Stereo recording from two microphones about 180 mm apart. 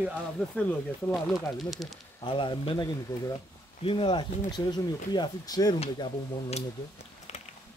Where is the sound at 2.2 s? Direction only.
25° left (ahead or behind).